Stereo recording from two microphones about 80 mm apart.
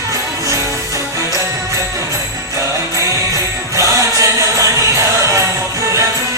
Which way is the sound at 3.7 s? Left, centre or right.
Right.